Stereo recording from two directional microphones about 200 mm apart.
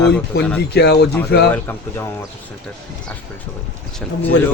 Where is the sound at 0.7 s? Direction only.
55° left (ahead or behind).